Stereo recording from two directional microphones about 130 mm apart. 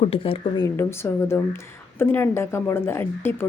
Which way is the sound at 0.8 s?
20° left (ahead or behind).